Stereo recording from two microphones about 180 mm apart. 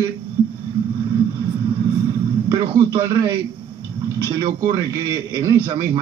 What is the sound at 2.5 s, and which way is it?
A man's voice, 20° right (ahead or behind).